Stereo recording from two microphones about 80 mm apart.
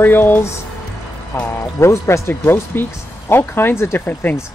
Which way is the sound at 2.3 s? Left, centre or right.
Left.